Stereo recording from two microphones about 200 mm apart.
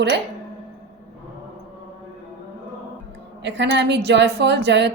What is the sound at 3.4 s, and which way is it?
A woman's voice, 60° right (ahead or behind).